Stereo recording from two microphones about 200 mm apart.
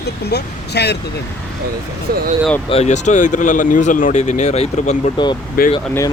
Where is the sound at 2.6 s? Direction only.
30° left (ahead or behind).